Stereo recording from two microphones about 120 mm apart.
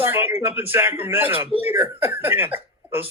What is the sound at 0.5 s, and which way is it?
A man's voice, 15° right (ahead or behind).